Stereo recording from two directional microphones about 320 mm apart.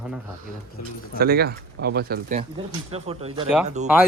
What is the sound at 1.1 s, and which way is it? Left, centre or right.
Speech, right.